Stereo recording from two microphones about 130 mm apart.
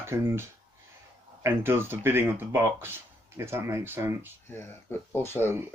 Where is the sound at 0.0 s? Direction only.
20° right (ahead or behind).